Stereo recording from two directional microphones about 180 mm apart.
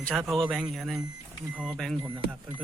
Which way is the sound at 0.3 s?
Centre (ahead or behind).